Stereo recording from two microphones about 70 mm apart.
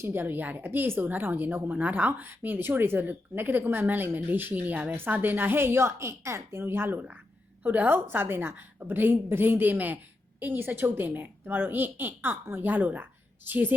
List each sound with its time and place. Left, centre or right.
0.0 s speech: right